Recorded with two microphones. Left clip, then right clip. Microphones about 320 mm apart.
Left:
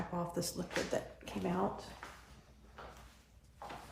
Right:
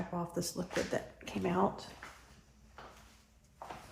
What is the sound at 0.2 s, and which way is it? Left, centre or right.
Speech, centre.